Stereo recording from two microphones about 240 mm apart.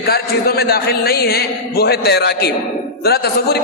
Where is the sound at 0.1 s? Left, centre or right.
Left.